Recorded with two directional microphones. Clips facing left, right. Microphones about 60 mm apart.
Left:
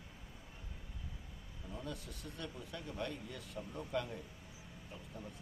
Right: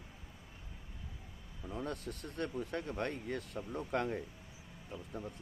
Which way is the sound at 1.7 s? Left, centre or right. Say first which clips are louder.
Right 6 dB; right.